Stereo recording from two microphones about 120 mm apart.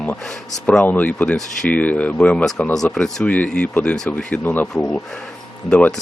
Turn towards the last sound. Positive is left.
turn(degrees=5)  # may be behind; listen again after turning